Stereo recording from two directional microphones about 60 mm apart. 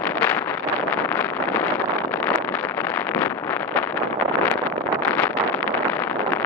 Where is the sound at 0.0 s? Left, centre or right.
Left.